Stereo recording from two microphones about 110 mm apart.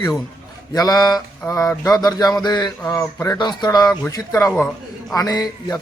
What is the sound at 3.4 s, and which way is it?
Speech, 40° left (ahead or behind).